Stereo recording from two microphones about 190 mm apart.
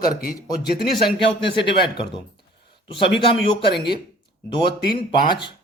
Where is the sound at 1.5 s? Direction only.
25° left (ahead or behind).